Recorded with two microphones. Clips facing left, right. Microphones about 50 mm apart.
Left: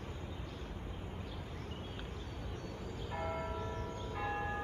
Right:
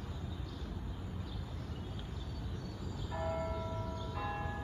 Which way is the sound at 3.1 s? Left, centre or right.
Left.